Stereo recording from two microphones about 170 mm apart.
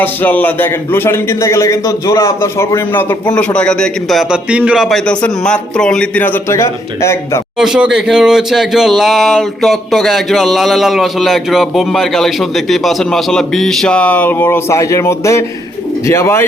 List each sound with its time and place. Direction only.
0.0 s a man's voice: 10° left (ahead or behind)
7.6 s a man's voice: 5° right (ahead or behind); by 16.5 s 15° left (ahead or behind)